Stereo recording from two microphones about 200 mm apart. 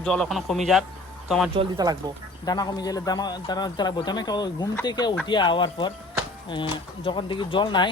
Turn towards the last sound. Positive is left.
turn(degrees=25)  # may be behind; listen again after turning